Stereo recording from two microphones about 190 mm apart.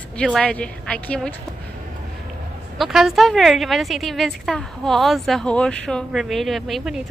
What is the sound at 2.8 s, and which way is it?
A woman's voice, centre (ahead or behind).